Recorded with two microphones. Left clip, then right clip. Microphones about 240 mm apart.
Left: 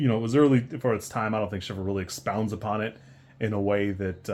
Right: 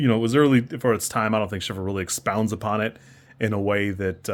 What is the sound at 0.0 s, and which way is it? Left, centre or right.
Speech, right.